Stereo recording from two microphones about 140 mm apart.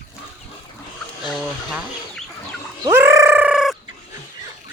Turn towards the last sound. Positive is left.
turn(degrees=-5)  # may be behind; listen again after turning